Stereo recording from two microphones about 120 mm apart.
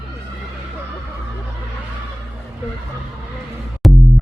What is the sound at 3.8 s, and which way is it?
Music, centre (ahead or behind).